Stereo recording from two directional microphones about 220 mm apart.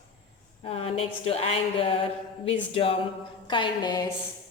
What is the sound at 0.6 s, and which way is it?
A woman's voice, 25° left (ahead or behind).